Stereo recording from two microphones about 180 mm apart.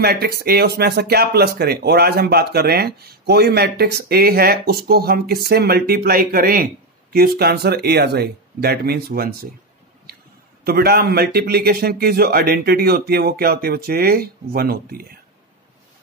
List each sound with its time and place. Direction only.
0.0 s speech: 60° right (ahead or behind)
10.6 s speech: 60° right (ahead or behind)